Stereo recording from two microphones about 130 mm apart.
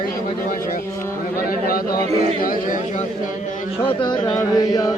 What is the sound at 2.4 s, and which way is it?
Speech, 90° left.